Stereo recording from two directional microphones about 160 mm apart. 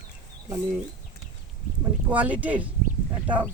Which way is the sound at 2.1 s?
10° right (ahead or behind).